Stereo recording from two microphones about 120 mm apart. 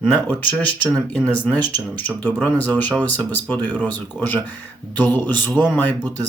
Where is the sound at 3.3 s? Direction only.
15° left (ahead or behind).